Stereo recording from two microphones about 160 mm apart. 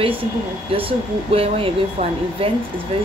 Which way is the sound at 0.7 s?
35° right (ahead or behind).